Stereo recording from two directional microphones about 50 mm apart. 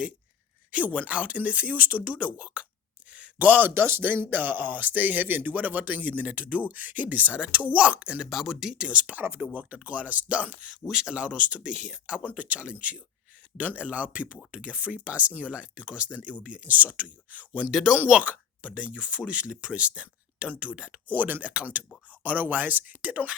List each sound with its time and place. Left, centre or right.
0.9 s speech: right
3.2 s a sound: right
3.8 s speech: right
8.3 s speech: centre
8.8 s speech: right
10.8 s speech: centre; by 17.7 s right
17.7 s speech: centre
17.9 s speech: right
21.1 s speech: right
21.4 s speech: right